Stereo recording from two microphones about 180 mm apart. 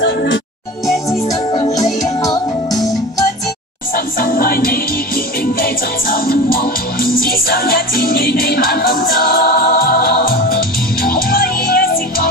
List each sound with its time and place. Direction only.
0.0 s music: 75° left (ahead or behind)
1.5 s music: 30° left (ahead or behind)
3.9 s music: 50° left (ahead or behind)